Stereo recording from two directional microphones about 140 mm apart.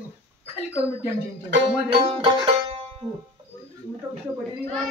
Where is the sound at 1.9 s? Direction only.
40° right (ahead or behind).